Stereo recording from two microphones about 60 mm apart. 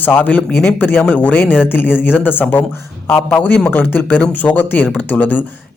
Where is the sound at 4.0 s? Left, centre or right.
Centre.